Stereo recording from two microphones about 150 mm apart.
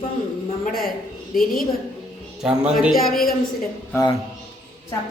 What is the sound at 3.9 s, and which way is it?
Speech, 20° left (ahead or behind).